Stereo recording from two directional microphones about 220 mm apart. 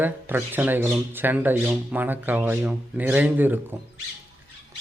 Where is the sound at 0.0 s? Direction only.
10° right (ahead or behind).